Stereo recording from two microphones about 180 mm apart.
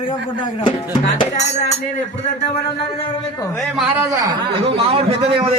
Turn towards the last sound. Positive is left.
turn(degrees=-30)  # may be behind; listen again after turning